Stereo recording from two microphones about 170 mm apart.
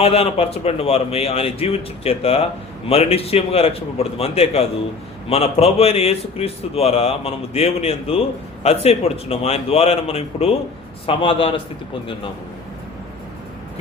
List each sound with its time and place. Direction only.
0.0 s a man's voice: 35° left (ahead or behind)